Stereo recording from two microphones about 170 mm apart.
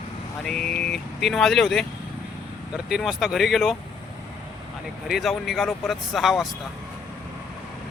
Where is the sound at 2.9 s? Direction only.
Centre (ahead or behind).